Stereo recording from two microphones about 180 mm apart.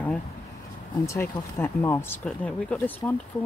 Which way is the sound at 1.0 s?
15° left (ahead or behind).